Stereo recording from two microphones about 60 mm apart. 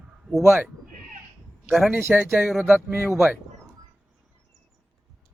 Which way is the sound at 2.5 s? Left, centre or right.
Centre.